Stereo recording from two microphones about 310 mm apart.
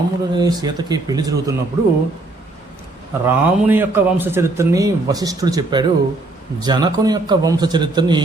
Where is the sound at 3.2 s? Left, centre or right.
Centre.